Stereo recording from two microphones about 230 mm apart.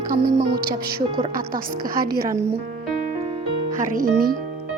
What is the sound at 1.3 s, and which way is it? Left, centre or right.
A woman's voice, right.